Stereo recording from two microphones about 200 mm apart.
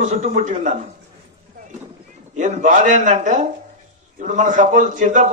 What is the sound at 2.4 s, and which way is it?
A man's voice, 40° right (ahead or behind).